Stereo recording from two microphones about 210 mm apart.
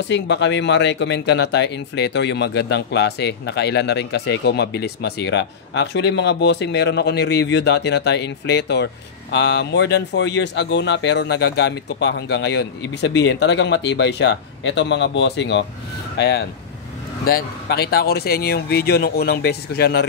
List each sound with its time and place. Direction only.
0.1 s speech: 55° left (ahead or behind)